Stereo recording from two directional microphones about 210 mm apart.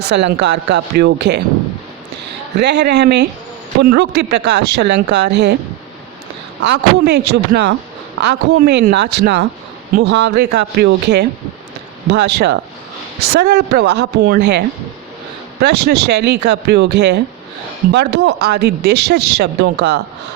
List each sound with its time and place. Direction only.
0.1 s speech: 55° right (ahead or behind)
2.6 s speech: 55° right (ahead or behind)
6.6 s speech: 55° right (ahead or behind)
15.6 s speech: 50° right (ahead or behind)